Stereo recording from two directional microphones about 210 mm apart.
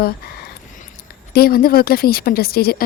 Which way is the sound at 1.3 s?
45° left (ahead or behind).